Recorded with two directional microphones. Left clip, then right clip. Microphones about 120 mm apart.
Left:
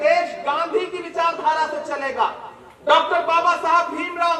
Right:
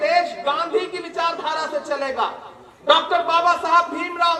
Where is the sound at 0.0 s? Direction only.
20° right (ahead or behind).